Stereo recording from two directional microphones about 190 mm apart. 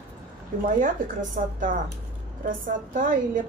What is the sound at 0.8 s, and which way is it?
Speech, 45° right (ahead or behind).